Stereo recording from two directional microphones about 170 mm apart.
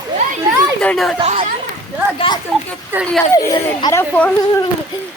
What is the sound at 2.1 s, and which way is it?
A child's voice, 30° left (ahead or behind).